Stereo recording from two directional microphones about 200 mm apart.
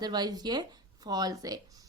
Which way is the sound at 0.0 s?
20° right (ahead or behind).